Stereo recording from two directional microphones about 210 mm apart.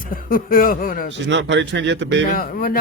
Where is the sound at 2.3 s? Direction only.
45° left (ahead or behind).